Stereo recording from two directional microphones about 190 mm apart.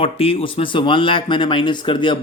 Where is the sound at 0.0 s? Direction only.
30° left (ahead or behind).